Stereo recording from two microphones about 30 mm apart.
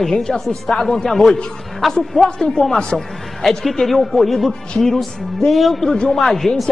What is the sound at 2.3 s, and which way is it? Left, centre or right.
Speech, centre.